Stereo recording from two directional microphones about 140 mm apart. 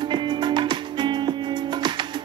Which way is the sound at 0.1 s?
35° right (ahead or behind).